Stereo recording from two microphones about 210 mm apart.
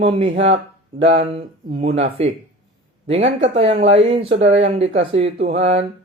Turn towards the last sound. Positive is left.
turn(degrees=-30)  # may be behind; listen again after turning